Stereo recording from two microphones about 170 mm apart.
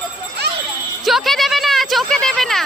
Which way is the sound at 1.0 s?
Centre (ahead or behind).